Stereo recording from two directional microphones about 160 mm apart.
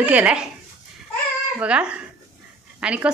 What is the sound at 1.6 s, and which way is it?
Speech, 5° right (ahead or behind).